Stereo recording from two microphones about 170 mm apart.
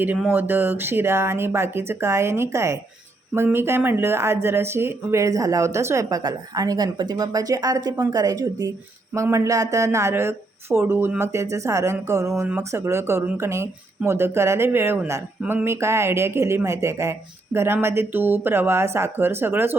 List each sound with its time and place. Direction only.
0.0 s speech: 10° right (ahead or behind)